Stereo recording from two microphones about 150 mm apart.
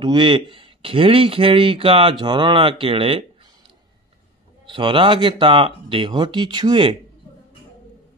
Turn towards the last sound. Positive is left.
turn(degrees=-30)  # may be behind; listen again after turning